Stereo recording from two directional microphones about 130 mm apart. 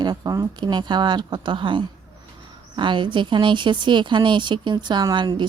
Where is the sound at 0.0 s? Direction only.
30° right (ahead or behind).